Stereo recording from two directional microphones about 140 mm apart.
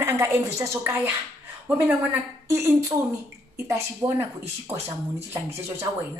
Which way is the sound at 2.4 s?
20° right (ahead or behind).